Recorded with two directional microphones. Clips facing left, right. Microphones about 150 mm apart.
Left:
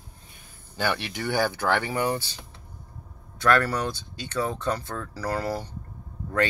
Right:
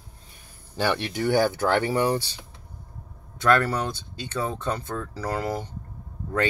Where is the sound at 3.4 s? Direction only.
25° right (ahead or behind).